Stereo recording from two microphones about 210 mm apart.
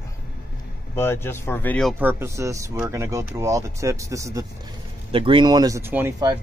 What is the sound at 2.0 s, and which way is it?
Speech, 10° right (ahead or behind).